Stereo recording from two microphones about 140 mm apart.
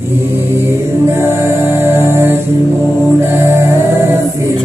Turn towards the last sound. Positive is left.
turn(degrees=-15)  # may be behind; listen again after turning